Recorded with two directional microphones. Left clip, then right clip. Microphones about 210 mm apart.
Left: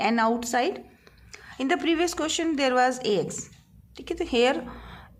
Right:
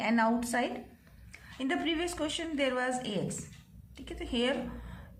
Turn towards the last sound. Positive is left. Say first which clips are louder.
# left 4 dB
turn(degrees=45)  # may be behind; listen again after turning